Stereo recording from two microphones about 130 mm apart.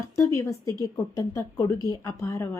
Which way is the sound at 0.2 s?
25° left (ahead or behind).